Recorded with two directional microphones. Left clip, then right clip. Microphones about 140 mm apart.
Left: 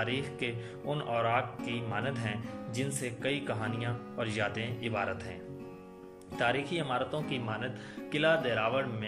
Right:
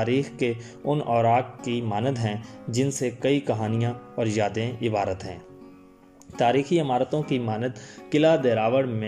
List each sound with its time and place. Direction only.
0.0 s speech: 35° right (ahead or behind)